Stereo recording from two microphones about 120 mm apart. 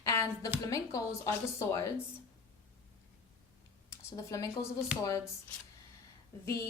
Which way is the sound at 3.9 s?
25° left (ahead or behind).